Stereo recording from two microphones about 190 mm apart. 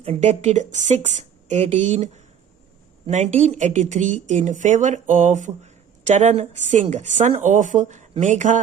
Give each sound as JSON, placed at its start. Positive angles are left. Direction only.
{"t": 0.0, "sound": "speech", "side_deg": -35}